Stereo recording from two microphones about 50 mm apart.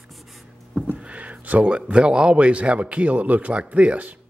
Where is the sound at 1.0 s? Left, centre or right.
Right.